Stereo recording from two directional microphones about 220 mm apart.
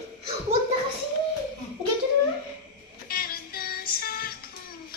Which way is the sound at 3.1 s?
40° left (ahead or behind).